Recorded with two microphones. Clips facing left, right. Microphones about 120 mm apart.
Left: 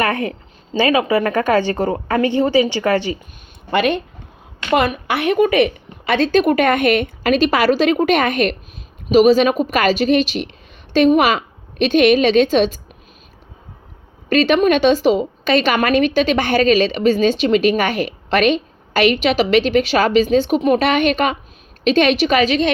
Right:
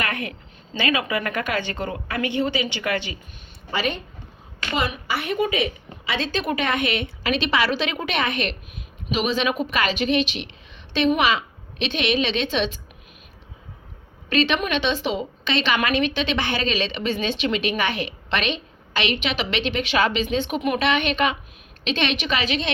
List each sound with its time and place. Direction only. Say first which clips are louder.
0.7 s a woman's voice: left 9 dB; 35° left (ahead or behind)
3.7 s a woman's voice: left 9 dB; 65° left (ahead or behind); by 12.8 s 40° left (ahead or behind)
14.3 s a woman's voice: left 8 dB; 40° left (ahead or behind)